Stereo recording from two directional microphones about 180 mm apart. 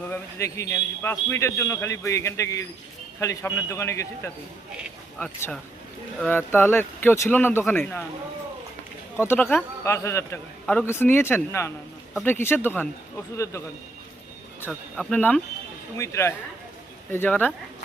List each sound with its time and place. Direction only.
0.1 s a man's voice: 15° left (ahead or behind)
9.2 s a man's voice: 10° left (ahead or behind)
14.7 s a man's voice: 5° left (ahead or behind)